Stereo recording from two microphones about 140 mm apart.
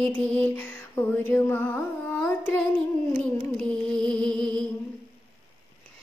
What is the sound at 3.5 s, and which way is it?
Music, 5° left (ahead or behind).